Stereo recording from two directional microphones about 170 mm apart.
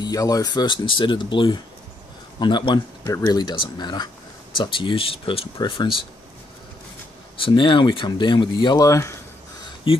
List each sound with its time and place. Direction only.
0.0 s speech: 20° left (ahead or behind)
7.3 s speech: 30° left (ahead or behind)